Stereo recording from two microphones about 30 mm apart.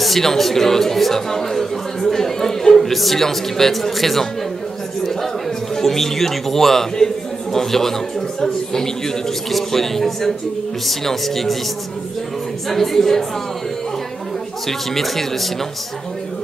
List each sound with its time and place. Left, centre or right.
0.0 s speech: centre
5.8 s speech: centre
9.5 s speech: centre
12.6 s speech: centre
14.7 s speech: centre